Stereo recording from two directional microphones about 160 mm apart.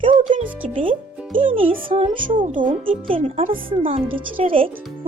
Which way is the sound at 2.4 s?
50° right (ahead or behind).